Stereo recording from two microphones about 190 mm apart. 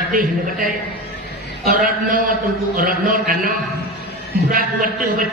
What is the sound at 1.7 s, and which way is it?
A man's voice, 45° right (ahead or behind).